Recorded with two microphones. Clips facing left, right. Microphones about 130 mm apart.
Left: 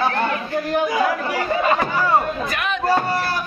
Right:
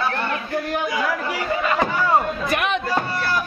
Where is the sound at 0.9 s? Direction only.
30° left (ahead or behind).